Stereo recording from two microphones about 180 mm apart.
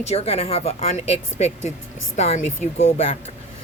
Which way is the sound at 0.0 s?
35° left (ahead or behind).